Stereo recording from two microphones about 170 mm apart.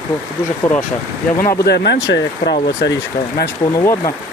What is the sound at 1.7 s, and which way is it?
Speech, 80° left.